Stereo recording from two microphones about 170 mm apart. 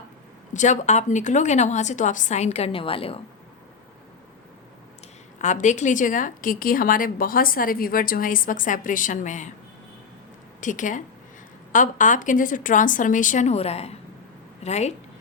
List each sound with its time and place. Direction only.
0.5 s a woman's voice: 45° left (ahead or behind)
5.4 s a woman's voice: 45° left (ahead or behind)
10.6 s a woman's voice: 50° left (ahead or behind)